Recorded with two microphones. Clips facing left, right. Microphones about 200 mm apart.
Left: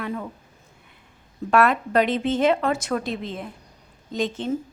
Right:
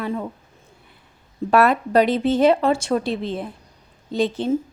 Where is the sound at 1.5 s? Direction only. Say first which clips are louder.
Right 2 dB; 35° right (ahead or behind).